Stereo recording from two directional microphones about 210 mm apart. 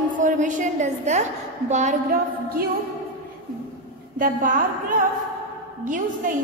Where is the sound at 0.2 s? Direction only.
35° right (ahead or behind).